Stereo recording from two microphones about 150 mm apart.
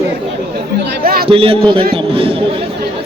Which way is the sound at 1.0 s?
80° right.